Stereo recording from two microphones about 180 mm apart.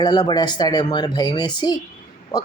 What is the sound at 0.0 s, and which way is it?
Speech, 25° left (ahead or behind).